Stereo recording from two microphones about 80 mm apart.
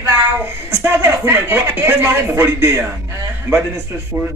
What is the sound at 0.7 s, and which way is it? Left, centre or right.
A man's voice, right.